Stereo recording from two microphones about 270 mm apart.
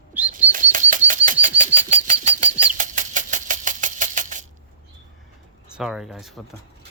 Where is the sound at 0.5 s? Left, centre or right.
Right.